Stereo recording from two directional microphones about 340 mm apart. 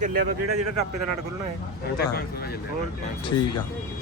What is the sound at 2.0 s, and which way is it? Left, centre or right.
Speech, left.